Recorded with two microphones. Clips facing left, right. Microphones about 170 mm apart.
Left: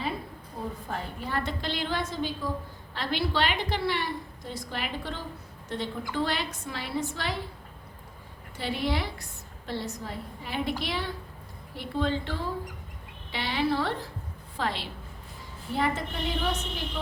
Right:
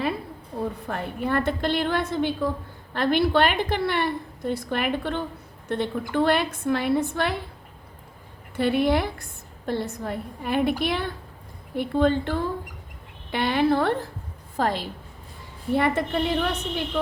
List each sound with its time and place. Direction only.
0.9 s a woman's voice: 60° right (ahead or behind)
8.5 s a woman's voice: 55° right (ahead or behind)
15.7 s a woman's voice: 60° right (ahead or behind)